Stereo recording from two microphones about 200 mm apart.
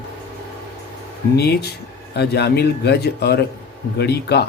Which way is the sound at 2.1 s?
55° left (ahead or behind).